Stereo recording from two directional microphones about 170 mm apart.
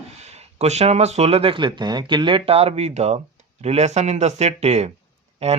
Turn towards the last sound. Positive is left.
turn(degrees=-40)  # may be behind; listen again after turning